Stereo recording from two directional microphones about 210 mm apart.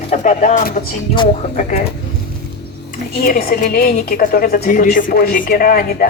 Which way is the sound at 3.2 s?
45° left (ahead or behind).